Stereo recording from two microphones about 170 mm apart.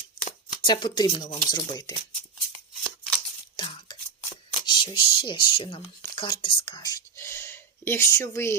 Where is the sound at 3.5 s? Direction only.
25° left (ahead or behind).